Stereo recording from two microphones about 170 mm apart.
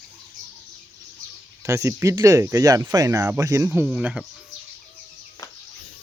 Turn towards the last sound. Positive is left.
turn(degrees=-5)  # may be behind; listen again after turning